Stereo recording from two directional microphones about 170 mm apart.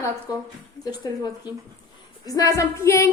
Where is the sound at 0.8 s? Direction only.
20° left (ahead or behind).